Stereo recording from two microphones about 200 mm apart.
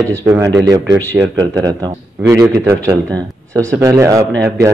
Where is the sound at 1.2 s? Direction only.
20° right (ahead or behind).